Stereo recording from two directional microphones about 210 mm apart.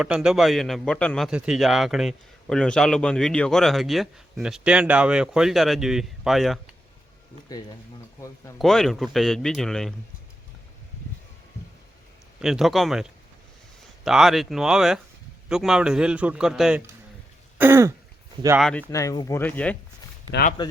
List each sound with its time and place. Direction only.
0.0 s a man's voice: 5° right (ahead or behind)
8.5 s a man's voice: centre (ahead or behind)
12.4 s a man's voice: centre (ahead or behind)
17.6 s throat clearing: 10° right (ahead or behind)
18.6 s speech: 5° left (ahead or behind)
20.6 s speech: 20° left (ahead or behind)